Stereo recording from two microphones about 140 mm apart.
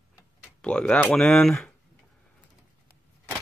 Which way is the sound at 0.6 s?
5° left (ahead or behind).